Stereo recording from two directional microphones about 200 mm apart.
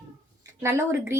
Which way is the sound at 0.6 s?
15° right (ahead or behind).